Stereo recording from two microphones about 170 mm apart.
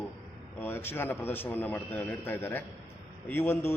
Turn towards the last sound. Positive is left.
turn(degrees=15)  # may be behind; listen again after turning